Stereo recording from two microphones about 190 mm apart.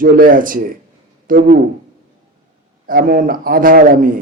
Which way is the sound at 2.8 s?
50° right (ahead or behind).